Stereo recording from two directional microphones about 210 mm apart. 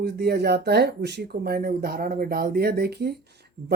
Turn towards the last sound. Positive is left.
turn(degrees=-50)  # may be behind; listen again after turning